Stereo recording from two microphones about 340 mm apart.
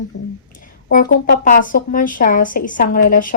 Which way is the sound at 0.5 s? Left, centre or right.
Left.